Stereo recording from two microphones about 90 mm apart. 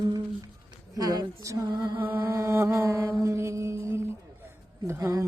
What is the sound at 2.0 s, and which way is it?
Mantra, 25° right (ahead or behind).